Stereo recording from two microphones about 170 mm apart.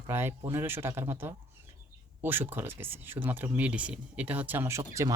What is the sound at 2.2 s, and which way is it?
Speech, 10° right (ahead or behind).